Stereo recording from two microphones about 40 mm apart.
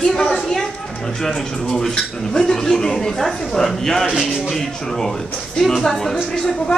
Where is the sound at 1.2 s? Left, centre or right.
Centre.